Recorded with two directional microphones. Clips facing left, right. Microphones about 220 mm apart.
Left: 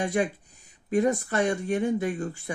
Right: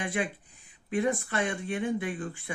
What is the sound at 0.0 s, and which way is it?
Speech, 40° left (ahead or behind).